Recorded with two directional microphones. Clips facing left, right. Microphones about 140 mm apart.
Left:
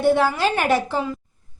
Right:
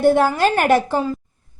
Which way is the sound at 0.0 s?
45° right (ahead or behind).